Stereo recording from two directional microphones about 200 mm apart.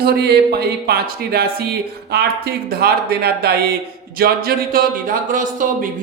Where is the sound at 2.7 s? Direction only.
50° right (ahead or behind).